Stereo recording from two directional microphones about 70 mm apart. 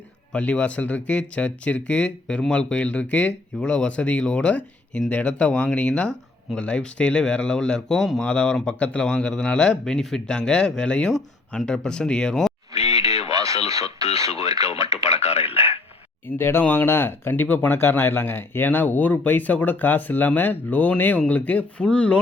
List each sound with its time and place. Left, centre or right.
0.3 s speech: centre
8.2 s speech: centre
13.3 s speech: right
16.2 s speech: left; by 22.2 s centre